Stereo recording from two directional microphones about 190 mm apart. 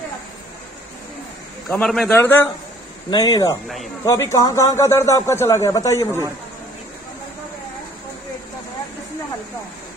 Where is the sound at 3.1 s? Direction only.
20° left (ahead or behind).